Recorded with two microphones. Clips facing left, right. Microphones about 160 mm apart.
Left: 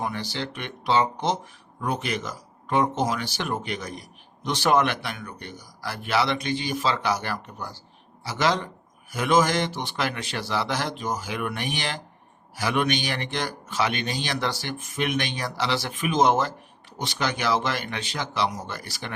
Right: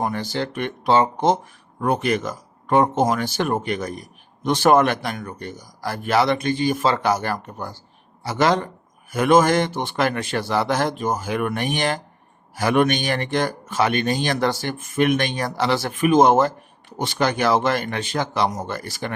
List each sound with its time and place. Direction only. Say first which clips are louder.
0.0 s a man's voice: right 6 dB; 50° right (ahead or behind)